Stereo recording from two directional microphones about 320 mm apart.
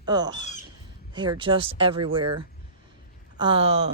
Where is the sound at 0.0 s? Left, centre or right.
Centre.